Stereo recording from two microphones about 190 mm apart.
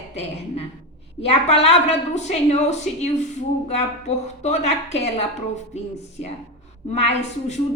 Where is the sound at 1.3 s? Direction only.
35° left (ahead or behind).